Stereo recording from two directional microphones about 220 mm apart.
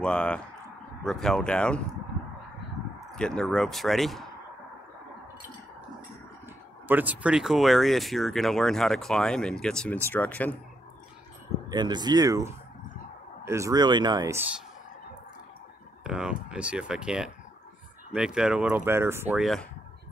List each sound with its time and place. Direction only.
0.0 s speech: 5° left (ahead or behind)
3.2 s speech: 5° left (ahead or behind)
6.9 s speech: 10° right (ahead or behind); by 10.5 s 5° left (ahead or behind)
11.7 s speech: 20° right (ahead or behind)
16.0 s speech: 5° right (ahead or behind)